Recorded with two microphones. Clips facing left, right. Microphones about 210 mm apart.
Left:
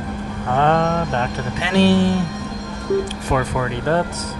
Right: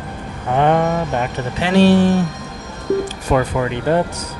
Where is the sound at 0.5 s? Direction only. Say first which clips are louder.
Right 2 dB; 10° right (ahead or behind).